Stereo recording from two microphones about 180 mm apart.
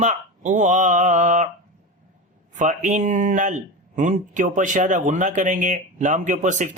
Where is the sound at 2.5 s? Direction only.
45° right (ahead or behind).